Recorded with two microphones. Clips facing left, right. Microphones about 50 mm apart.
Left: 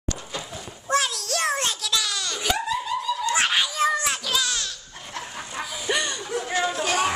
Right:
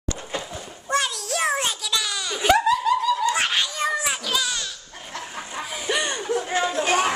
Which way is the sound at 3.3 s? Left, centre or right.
Centre.